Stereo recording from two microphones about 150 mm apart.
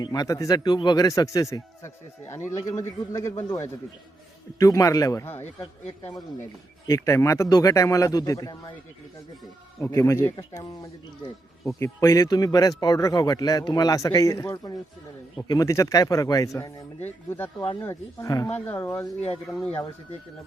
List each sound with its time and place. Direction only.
0.0 s a man's voice: 25° left (ahead or behind)
5.8 s speech: 40° left (ahead or behind)
6.8 s a man's voice: 20° left (ahead or behind)
9.8 s speech: 20° left (ahead or behind)
11.8 s a man's voice: 20° left (ahead or behind)
19.5 s speech: 10° left (ahead or behind)